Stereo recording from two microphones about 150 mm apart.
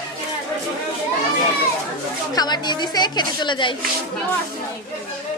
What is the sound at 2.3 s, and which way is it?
A woman's voice, 30° left (ahead or behind).